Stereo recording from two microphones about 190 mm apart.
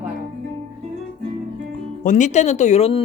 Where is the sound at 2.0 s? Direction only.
40° left (ahead or behind).